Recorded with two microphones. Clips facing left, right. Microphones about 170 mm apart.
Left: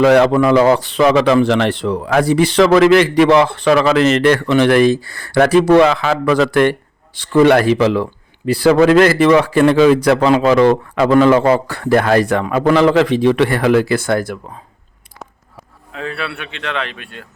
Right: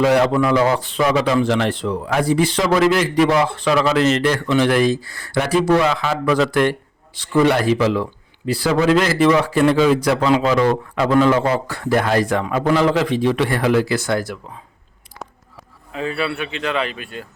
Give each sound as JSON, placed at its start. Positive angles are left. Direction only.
{"t": 0.0, "sound": "a man's voice", "side_deg": 70}
{"t": 15.9, "sound": "a man's voice", "side_deg": -5}